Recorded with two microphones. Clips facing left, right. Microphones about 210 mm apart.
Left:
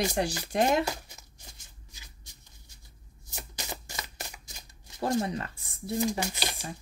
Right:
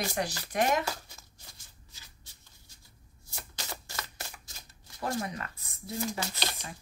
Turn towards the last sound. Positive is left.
turn(degrees=15)  # may be behind; listen again after turning